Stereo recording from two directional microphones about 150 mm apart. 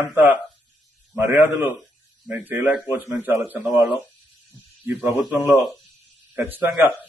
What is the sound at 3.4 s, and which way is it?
A man's voice, 5° right (ahead or behind).